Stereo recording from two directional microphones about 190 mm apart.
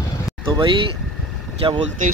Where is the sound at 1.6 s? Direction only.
30° right (ahead or behind).